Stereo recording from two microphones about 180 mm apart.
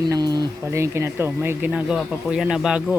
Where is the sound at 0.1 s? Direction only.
25° right (ahead or behind).